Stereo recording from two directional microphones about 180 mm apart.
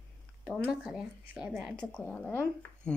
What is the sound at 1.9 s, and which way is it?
Speech, 5° left (ahead or behind).